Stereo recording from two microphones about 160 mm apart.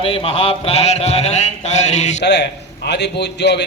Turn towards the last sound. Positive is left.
turn(degrees=90)